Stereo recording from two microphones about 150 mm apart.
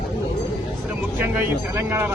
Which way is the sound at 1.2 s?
15° right (ahead or behind).